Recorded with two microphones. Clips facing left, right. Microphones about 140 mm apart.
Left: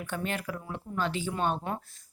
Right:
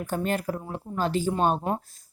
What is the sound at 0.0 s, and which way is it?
Speech, 40° right (ahead or behind).